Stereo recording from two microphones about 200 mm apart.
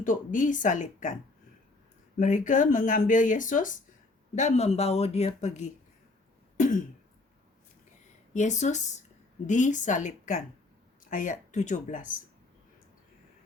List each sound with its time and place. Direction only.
0.0 s speech: 40° left (ahead or behind)
2.1 s speech: 40° left (ahead or behind)
8.3 s speech: 35° left (ahead or behind)